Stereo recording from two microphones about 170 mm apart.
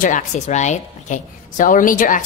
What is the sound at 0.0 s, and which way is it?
A woman's voice, 45° left (ahead or behind).